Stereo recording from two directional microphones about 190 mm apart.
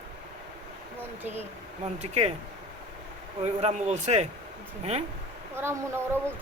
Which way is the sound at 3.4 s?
35° right (ahead or behind).